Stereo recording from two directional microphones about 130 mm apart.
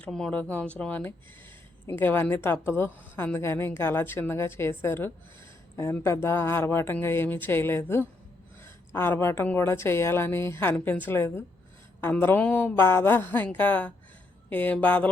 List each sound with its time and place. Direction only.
0.0 s a woman's voice: 5° left (ahead or behind)